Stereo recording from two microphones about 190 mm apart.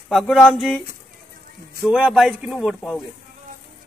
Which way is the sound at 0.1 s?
Centre (ahead or behind).